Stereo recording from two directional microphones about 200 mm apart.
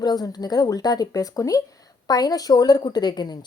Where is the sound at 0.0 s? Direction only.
20° left (ahead or behind).